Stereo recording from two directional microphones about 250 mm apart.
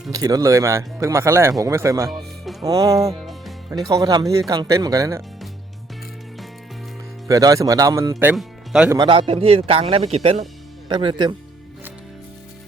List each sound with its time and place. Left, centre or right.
0.1 s speech: centre
2.0 s music: centre
2.6 s speech: centre
7.3 s speech: centre
9.0 s speech: right